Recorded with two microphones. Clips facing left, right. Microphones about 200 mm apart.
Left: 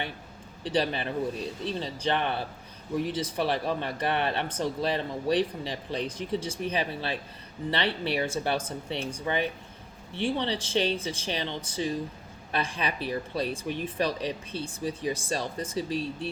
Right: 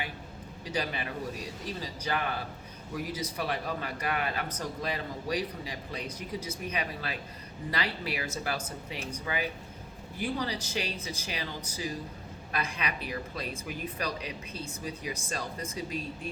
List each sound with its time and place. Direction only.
0.7 s a man's voice: 30° left (ahead or behind)